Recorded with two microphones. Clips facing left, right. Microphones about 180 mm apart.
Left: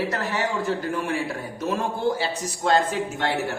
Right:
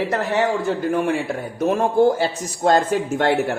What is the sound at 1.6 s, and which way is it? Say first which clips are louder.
Speech: right 10 dB; 55° right (ahead or behind).